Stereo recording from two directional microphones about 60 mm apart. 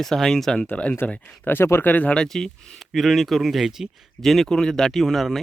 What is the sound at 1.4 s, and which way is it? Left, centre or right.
Speech, left.